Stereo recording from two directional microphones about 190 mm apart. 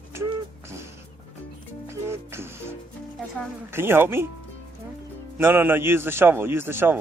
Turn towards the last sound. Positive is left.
turn(degrees=-10)  # may be behind; listen again after turning